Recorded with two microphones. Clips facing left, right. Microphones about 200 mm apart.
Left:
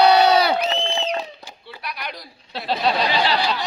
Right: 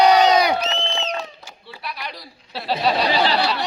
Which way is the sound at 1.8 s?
Centre (ahead or behind).